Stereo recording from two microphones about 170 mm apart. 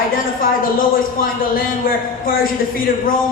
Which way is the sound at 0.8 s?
55° left (ahead or behind).